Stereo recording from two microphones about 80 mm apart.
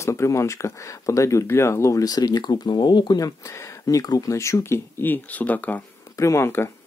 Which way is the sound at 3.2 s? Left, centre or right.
Left.